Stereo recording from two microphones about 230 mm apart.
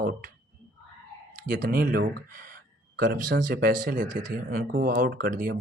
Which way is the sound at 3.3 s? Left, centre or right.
Right.